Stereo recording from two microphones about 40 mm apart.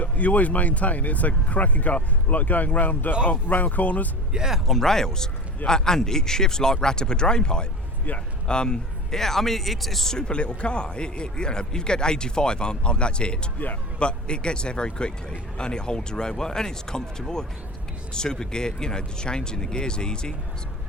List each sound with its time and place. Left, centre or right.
0.0 s speech: left
4.3 s speech: centre
4.6 s speech: centre; by 8.8 s left
9.1 s speech: centre